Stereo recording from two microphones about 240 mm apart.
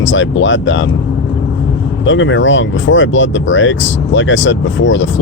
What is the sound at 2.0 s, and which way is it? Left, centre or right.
Speech, left.